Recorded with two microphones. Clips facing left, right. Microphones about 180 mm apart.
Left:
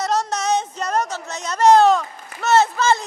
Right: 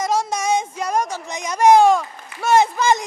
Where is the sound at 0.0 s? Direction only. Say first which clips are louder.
Right 1 dB; 10° right (ahead or behind).